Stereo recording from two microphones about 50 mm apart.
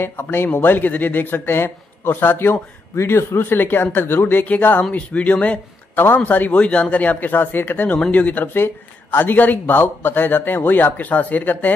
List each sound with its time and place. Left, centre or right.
0.0 s speech: left
0.5 s speech: left
3.0 s speech: left
4.5 s speech: left
6.2 s speech: left
6.5 s speech: left
8.5 s speech: left